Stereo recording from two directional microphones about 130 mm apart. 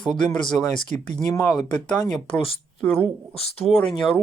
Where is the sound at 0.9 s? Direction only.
60° right (ahead or behind).